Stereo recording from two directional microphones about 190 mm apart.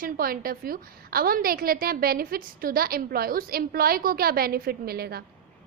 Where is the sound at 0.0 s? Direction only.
50° right (ahead or behind).